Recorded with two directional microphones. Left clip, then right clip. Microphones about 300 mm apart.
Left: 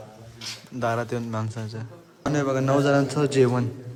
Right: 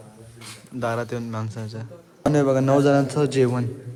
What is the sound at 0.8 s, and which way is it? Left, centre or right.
A man's voice, centre.